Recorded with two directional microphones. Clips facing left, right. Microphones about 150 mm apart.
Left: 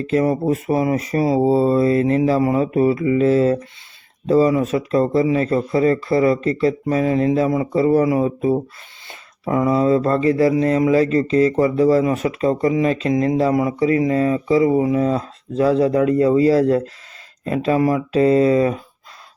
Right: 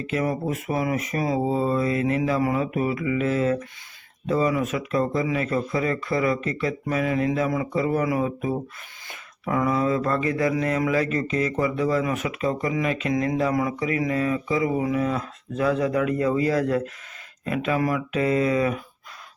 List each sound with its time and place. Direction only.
0.0 s speech: 35° left (ahead or behind)